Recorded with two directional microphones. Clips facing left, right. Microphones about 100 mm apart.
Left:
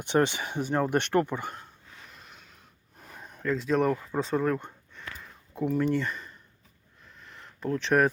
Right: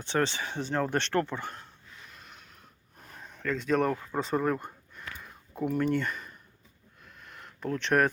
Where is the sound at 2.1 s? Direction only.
Centre (ahead or behind).